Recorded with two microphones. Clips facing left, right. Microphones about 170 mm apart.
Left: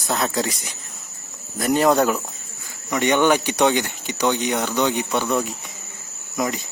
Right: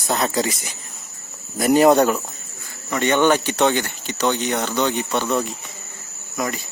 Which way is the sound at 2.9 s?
15° left (ahead or behind).